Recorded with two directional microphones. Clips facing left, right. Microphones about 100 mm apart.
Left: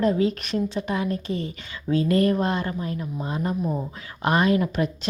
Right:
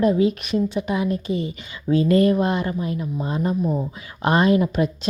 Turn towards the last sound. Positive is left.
turn(degrees=-20)  # may be behind; listen again after turning